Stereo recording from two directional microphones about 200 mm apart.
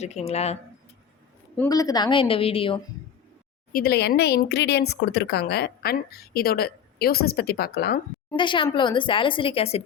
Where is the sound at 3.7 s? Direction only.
50° left (ahead or behind).